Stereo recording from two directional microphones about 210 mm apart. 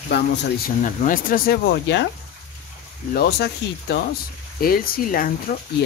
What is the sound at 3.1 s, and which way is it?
Speech, 50° left (ahead or behind).